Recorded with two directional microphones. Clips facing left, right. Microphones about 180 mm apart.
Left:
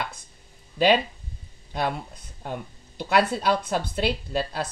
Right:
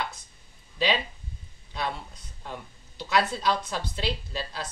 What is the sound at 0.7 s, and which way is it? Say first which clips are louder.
Speech: left 7 dB; 50° left (ahead or behind).